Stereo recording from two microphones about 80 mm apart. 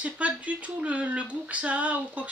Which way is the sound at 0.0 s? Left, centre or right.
Centre.